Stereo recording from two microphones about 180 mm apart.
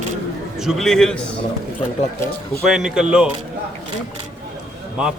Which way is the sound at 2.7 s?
5° right (ahead or behind).